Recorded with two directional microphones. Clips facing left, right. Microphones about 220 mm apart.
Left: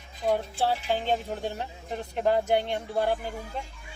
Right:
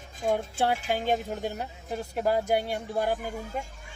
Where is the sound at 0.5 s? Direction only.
15° right (ahead or behind).